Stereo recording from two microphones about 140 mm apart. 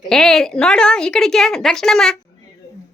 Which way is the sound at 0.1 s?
5° left (ahead or behind).